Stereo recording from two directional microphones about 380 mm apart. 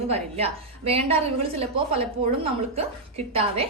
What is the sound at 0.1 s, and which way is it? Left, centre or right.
A woman's voice, centre.